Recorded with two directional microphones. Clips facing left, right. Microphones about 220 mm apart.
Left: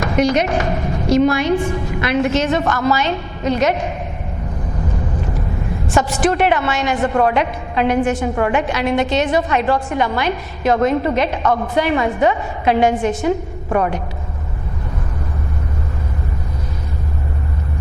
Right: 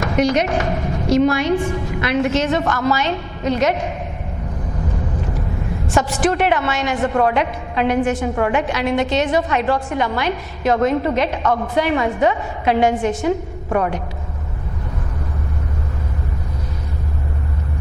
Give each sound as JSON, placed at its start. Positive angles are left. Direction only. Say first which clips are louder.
{"t": 0.0, "sound": "a woman's voice", "louder": "left 1 dB", "side_deg": 10}
{"t": 5.9, "sound": "a woman's voice", "louder": "left 1 dB", "side_deg": 10}
{"t": 11.4, "sound": "a man's voice", "louder": "left 1 dB", "side_deg": 25}
{"t": 11.7, "sound": "a woman's voice", "louder": "left 1 dB", "side_deg": 15}